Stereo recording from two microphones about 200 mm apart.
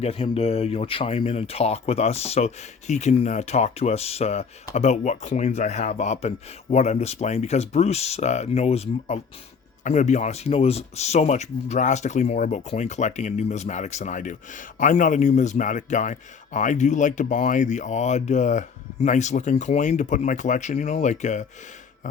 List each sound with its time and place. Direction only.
0.0 s speech: 30° left (ahead or behind)